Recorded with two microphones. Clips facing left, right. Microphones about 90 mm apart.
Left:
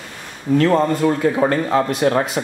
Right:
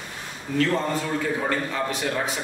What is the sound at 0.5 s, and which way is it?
A man's voice, 45° left (ahead or behind).